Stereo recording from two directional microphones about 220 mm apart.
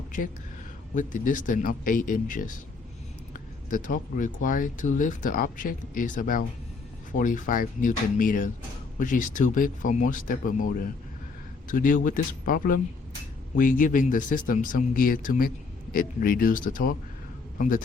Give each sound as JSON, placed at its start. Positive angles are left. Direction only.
{"t": 0.9, "sound": "speech", "side_deg": 35}
{"t": 11.7, "sound": "speech", "side_deg": 35}